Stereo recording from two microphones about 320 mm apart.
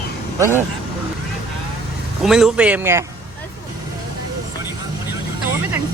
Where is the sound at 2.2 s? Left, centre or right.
Centre.